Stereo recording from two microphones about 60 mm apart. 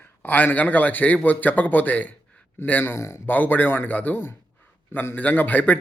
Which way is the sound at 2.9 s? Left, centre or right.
Left.